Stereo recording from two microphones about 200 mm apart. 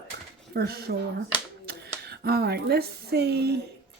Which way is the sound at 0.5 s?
50° right (ahead or behind).